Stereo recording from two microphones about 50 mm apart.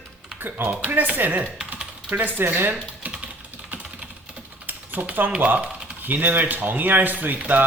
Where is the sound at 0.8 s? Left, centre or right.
Right.